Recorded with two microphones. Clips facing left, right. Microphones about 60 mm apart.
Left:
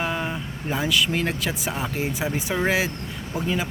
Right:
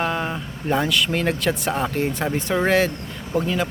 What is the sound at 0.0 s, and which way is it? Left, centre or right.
Speech, centre.